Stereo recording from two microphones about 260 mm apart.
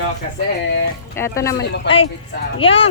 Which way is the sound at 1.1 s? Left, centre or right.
Centre.